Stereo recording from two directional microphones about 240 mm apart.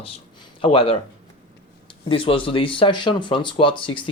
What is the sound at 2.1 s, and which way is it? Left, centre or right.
Speech, left.